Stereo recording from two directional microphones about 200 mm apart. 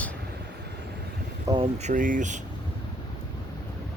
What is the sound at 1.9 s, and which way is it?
Speech, 40° right (ahead or behind).